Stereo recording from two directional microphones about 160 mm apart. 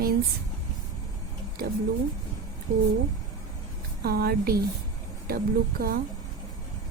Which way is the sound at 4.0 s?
75° right (ahead or behind).